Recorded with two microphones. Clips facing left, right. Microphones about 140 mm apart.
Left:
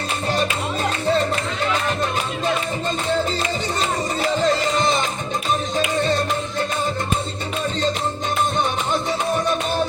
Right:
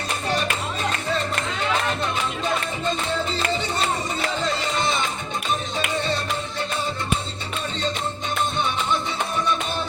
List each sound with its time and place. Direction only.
4.4 s music: 40° left (ahead or behind)